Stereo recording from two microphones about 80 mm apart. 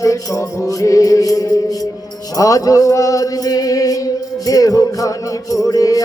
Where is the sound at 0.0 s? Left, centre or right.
Left.